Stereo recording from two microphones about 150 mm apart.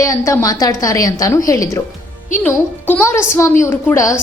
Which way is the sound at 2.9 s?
15° left (ahead or behind).